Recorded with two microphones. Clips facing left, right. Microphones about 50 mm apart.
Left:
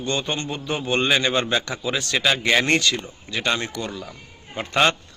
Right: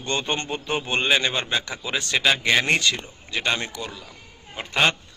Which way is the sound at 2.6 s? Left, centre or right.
Centre.